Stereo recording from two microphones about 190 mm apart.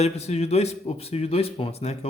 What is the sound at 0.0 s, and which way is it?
A man's voice, 35° left (ahead or behind).